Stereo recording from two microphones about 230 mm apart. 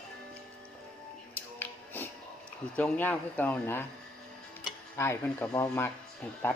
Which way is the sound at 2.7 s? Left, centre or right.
Centre.